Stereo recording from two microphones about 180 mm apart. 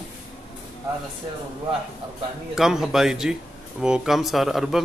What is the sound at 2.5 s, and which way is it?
Speech, centre (ahead or behind).